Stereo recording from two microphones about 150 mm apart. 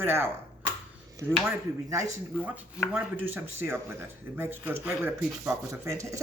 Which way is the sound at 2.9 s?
10° right (ahead or behind).